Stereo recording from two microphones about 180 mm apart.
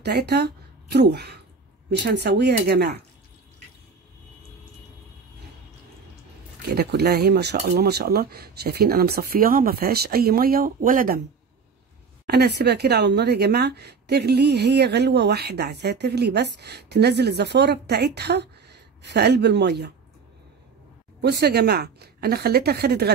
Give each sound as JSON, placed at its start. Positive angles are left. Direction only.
{"t": 0.0, "sound": "speech", "side_deg": -65}
{"t": 6.7, "sound": "speech", "side_deg": -60}
{"t": 12.3, "sound": "speech", "side_deg": -65}
{"t": 21.2, "sound": "speech", "side_deg": -65}